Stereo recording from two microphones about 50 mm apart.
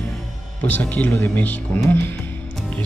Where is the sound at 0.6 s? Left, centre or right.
Left.